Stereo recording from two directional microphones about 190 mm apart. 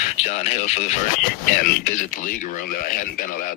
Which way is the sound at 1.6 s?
45° left (ahead or behind).